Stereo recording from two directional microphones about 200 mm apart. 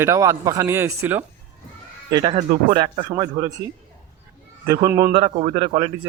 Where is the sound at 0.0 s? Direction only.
15° right (ahead or behind).